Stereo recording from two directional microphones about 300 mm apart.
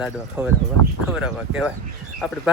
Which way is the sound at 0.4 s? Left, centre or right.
Centre.